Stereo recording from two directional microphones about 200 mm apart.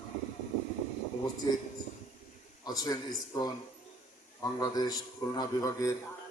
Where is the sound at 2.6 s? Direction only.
20° left (ahead or behind).